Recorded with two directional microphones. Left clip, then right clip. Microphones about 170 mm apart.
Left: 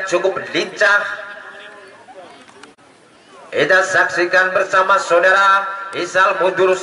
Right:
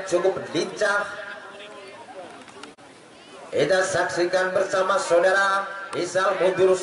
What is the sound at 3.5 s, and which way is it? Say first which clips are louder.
Speech: left 8 dB; 20° left (ahead or behind).